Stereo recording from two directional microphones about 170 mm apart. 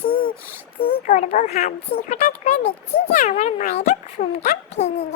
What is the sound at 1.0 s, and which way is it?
Speech, 45° left (ahead or behind).